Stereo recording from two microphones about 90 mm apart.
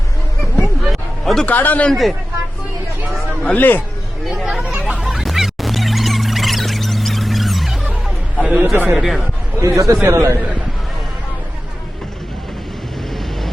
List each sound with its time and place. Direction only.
0.6 s a sound: centre (ahead or behind)
1.5 s a man's voice: 20° left (ahead or behind)
1.9 s speech: centre (ahead or behind)
3.4 s a man's voice: 15° left (ahead or behind)
4.4 s hubbub: centre (ahead or behind)
4.9 s music: 5° right (ahead or behind)
8.4 s a sound: 10° right (ahead or behind)
8.6 s a man's voice: 30° right (ahead or behind)
8.9 s speech: 5° right (ahead or behind)
9.6 s a man's voice: 35° right (ahead or behind)